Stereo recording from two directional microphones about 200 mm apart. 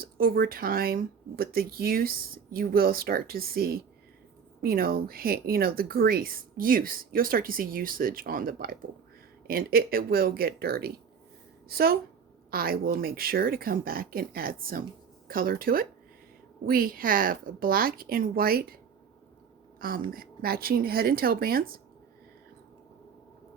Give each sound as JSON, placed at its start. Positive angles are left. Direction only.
{"t": 0.0, "sound": "speech", "side_deg": -45}
{"t": 20.1, "sound": "speech", "side_deg": -45}